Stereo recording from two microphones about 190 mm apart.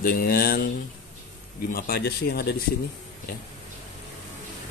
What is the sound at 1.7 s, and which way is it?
Speech, 50° left (ahead or behind).